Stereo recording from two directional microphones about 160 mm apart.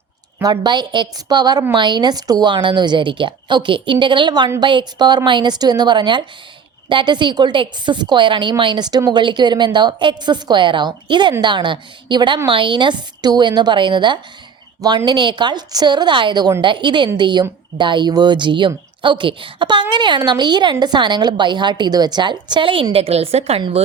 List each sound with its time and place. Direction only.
0.5 s a woman's voice: 30° right (ahead or behind)